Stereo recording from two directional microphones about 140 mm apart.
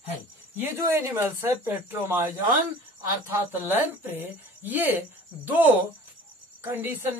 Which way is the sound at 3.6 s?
15° right (ahead or behind).